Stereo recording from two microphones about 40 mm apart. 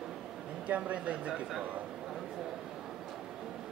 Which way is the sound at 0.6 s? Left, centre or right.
Right.